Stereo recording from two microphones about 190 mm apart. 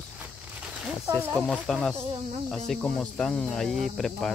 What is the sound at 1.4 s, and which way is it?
Speech, 5° left (ahead or behind).